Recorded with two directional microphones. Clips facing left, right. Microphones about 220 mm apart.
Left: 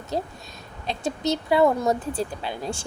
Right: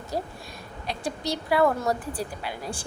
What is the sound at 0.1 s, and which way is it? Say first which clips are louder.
A woman's voice: left 3 dB; 25° left (ahead or behind).